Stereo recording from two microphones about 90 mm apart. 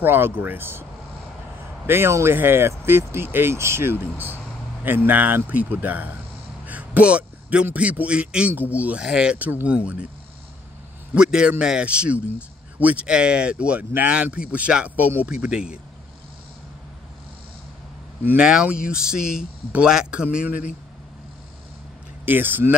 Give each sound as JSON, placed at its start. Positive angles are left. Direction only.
{"t": 0.0, "sound": "speech", "side_deg": -20}
{"t": 1.9, "sound": "a man's voice", "side_deg": -25}
{"t": 11.1, "sound": "speech", "side_deg": -10}
{"t": 18.2, "sound": "speech", "side_deg": -20}
{"t": 22.2, "sound": "speech", "side_deg": -20}